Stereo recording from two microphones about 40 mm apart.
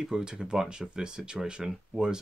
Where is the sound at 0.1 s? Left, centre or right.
Centre.